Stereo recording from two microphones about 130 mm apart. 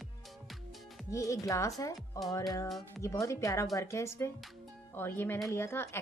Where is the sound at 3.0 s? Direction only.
20° left (ahead or behind).